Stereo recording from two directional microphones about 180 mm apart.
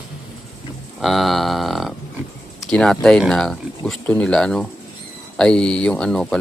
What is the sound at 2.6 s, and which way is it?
Speech, 5° left (ahead or behind).